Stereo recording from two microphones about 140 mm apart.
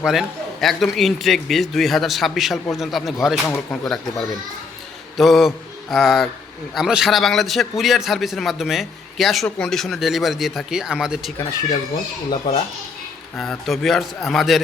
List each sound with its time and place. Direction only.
0.0 s a man's voice: centre (ahead or behind)
3.4 s speech: 15° left (ahead or behind)
5.1 s mantra: centre (ahead or behind)
6.7 s a man's voice: 5° right (ahead or behind)
11.3 s speech: 25° left (ahead or behind)
13.3 s a man's voice: 5° left (ahead or behind)